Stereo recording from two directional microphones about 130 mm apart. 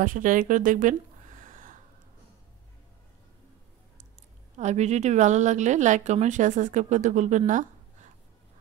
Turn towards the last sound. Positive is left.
turn(degrees=-75)  # may be behind; listen again after turning